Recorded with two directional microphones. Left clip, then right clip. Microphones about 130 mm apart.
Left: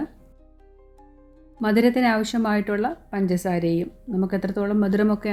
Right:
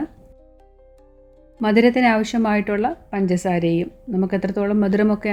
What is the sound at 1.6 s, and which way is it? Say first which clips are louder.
Speech: right 4 dB; 10° right (ahead or behind).